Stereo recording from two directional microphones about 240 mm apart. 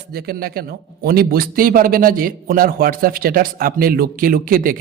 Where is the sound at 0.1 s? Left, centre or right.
Right.